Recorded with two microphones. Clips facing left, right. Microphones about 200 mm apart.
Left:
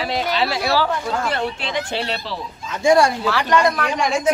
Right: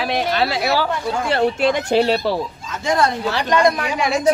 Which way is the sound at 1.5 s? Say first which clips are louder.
Right 9 dB; 45° right (ahead or behind).